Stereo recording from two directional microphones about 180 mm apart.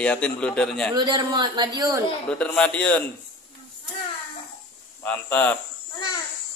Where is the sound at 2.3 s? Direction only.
5° left (ahead or behind).